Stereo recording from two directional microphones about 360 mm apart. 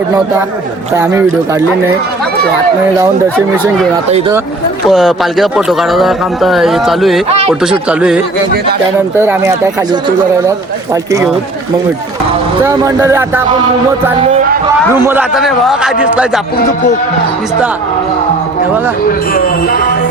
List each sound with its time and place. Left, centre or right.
0.9 s speech: centre
4.9 s speech: centre
7.3 s speech: centre
7.6 s speech: centre
12.6 s speech: centre
14.9 s speech: centre
19.0 s speech: left